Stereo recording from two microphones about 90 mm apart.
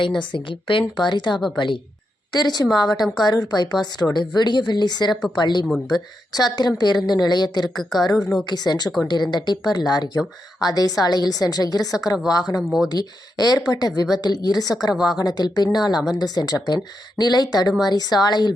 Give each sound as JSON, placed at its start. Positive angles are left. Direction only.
{"t": 0.2, "sound": "a woman's voice", "side_deg": 65}
{"t": 2.3, "sound": "a woman's voice", "side_deg": 50}